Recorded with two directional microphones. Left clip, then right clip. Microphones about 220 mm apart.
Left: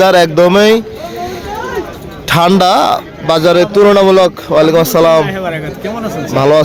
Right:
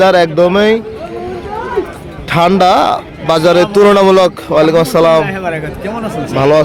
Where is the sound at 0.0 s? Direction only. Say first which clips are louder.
Left 1 dB; 15° left (ahead or behind).